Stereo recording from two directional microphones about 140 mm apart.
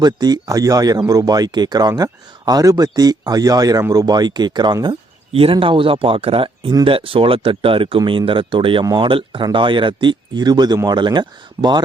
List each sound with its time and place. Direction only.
0.0 s speech: 30° right (ahead or behind)
5.3 s speech: 40° right (ahead or behind)